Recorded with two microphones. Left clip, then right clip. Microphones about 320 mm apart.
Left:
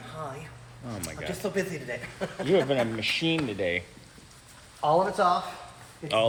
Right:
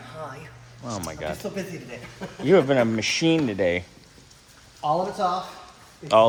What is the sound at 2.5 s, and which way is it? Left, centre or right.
Speech, right.